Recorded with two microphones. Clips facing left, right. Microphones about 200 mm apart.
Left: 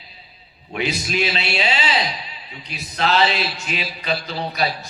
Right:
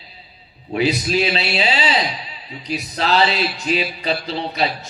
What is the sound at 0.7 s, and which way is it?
A man's voice, 35° right (ahead or behind).